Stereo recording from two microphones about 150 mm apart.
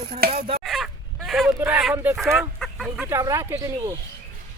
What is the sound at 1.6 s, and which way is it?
Speech, 5° right (ahead or behind).